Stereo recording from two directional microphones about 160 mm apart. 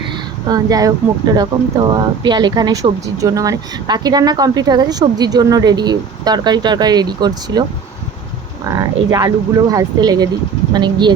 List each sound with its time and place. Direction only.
0.4 s speech: 25° right (ahead or behind)
8.6 s speech: 25° right (ahead or behind)